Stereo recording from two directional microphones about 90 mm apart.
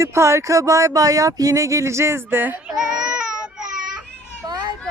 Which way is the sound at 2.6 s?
10° right (ahead or behind).